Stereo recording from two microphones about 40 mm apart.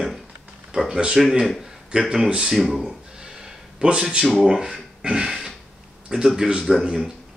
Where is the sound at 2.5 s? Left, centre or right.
Centre.